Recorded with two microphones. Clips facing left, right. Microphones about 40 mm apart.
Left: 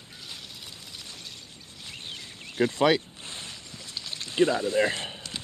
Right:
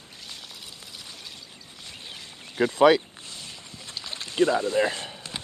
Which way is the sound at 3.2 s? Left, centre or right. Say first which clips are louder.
Left 1 dB; left.